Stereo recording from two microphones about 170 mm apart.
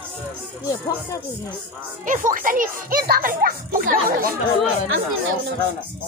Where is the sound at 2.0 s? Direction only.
50° right (ahead or behind).